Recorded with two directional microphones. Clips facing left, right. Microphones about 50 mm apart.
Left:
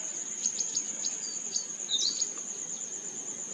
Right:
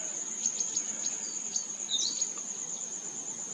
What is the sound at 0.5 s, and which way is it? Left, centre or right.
Chirp, right.